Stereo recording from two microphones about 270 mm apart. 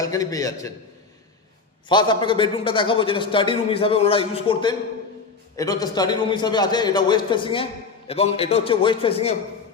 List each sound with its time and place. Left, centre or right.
0.0 s a man's voice: centre
1.9 s a man's voice: centre